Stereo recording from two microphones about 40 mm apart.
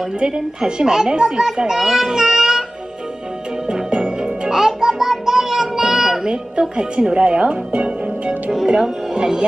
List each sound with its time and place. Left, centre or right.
0.2 s a child's voice: right
2.2 s music: right
3.6 s music: right
4.6 s child singing: centre
6.8 s a child's voice: right